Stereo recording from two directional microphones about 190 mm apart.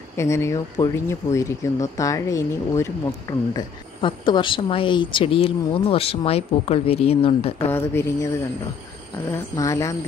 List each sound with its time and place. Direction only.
0.2 s speech: 15° left (ahead or behind)
7.6 s speech: 10° left (ahead or behind)
9.3 s speech: 15° left (ahead or behind)